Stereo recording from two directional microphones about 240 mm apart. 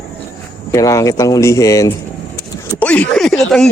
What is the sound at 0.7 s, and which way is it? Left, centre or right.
Speech, centre.